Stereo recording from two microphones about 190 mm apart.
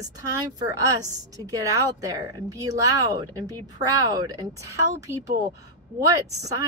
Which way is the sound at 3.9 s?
20° right (ahead or behind).